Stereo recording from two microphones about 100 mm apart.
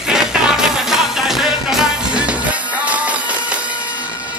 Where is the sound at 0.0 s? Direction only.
5° right (ahead or behind).